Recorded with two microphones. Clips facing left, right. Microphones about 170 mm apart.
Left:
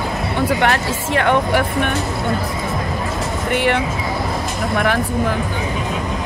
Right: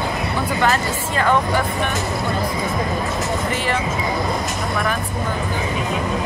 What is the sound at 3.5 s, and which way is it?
Speech, 65° left (ahead or behind).